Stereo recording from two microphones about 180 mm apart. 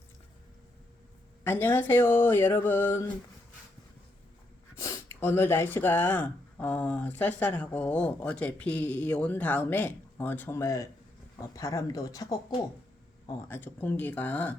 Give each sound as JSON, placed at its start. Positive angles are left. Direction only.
{"t": 1.5, "sound": "speech", "side_deg": 10}
{"t": 4.8, "sound": "speech", "side_deg": 15}
{"t": 13.5, "sound": "speech", "side_deg": 10}